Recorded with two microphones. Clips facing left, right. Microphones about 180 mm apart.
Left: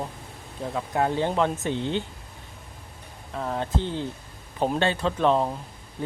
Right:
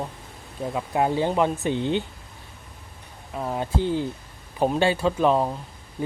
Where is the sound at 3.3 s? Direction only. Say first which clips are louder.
Right 1 dB; 10° right (ahead or behind).